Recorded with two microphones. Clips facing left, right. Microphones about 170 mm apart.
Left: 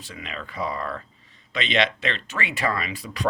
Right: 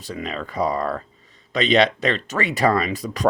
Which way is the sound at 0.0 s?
40° right (ahead or behind).